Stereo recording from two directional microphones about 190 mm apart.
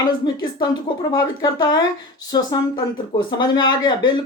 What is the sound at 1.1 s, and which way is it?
Speech, 20° left (ahead or behind).